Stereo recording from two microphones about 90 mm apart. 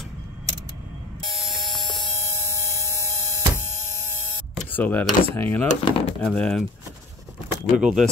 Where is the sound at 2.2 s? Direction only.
35° right (ahead or behind).